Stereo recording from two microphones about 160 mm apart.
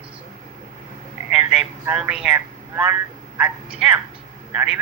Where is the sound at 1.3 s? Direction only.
5° right (ahead or behind).